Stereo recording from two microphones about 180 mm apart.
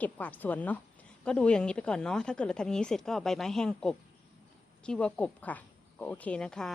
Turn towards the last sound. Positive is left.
turn(degrees=5)  # may be behind; listen again after turning